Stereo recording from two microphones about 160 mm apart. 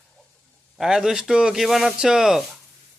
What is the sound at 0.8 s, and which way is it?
Speech, 5° right (ahead or behind).